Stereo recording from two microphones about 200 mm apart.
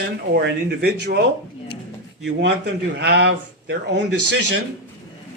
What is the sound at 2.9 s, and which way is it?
Speech, 55° right (ahead or behind).